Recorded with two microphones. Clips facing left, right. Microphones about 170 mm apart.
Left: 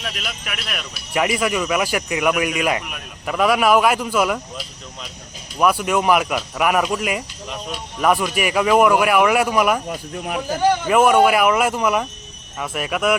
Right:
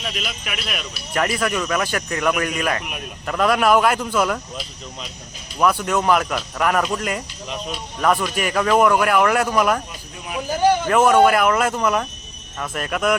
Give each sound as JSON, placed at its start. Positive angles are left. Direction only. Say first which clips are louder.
{"t": 0.0, "sound": "speech", "louder": "right 1 dB", "side_deg": 0}
{"t": 1.1, "sound": "speech", "louder": "left 2 dB", "side_deg": 10}
{"t": 9.9, "sound": "speech", "louder": "left 5 dB", "side_deg": 55}
{"t": 10.8, "sound": "speech", "louder": "left 1 dB", "side_deg": 10}